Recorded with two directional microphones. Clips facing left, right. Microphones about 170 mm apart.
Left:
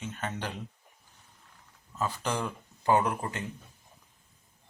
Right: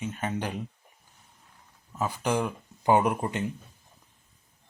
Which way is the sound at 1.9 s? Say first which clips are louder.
Right 4 dB; 15° right (ahead or behind).